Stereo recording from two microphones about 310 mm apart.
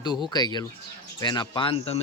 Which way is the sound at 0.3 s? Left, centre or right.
Centre.